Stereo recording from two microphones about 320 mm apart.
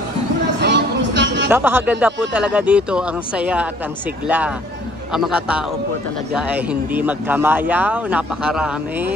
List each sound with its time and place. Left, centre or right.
0.6 s music: right
1.5 s speech: centre